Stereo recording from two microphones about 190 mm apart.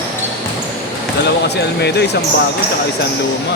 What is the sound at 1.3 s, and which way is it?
Speech, 60° left (ahead or behind).